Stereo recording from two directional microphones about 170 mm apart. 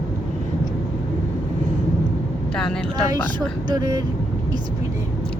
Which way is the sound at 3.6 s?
20° right (ahead or behind).